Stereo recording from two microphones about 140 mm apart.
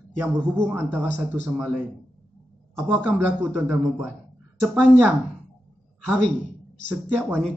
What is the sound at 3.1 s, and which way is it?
Speech, 20° right (ahead or behind).